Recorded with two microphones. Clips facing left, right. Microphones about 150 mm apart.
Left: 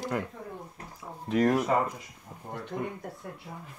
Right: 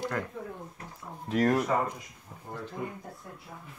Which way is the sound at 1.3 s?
Centre (ahead or behind).